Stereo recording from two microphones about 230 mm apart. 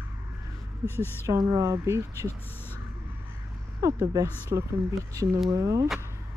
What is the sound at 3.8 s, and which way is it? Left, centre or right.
Speech, centre.